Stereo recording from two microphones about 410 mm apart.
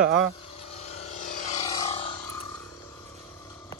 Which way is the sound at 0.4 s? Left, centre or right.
Centre.